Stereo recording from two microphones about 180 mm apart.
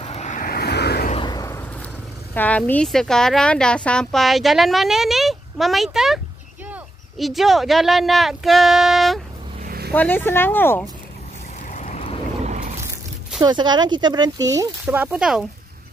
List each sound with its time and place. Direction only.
0.0 s vehicle: 40° left (ahead or behind); by 1.0 s 65° left (ahead or behind)
1.2 s vehicle: 20° left (ahead or behind)
2.3 s a woman's voice: 10° left (ahead or behind)
9.6 s a sound: 60° right (ahead or behind)
9.9 s speech: 10° left (ahead or behind)
11.7 s vehicle: 40° left (ahead or behind)
12.4 s a sound: 40° right (ahead or behind)
13.4 s speech: 25° right (ahead or behind); by 15.4 s 5° right (ahead or behind)